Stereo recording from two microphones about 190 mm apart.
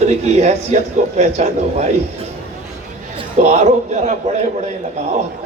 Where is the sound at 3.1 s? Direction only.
35° right (ahead or behind).